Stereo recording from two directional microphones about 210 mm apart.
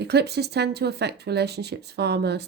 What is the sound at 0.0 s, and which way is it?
Speech, 50° right (ahead or behind).